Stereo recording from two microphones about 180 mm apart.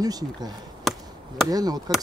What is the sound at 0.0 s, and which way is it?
Speech, 20° right (ahead or behind).